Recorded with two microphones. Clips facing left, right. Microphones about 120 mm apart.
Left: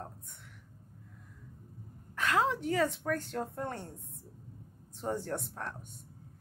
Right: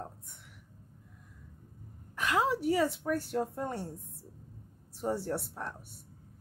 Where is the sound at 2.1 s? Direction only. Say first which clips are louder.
Even; 15° right (ahead or behind).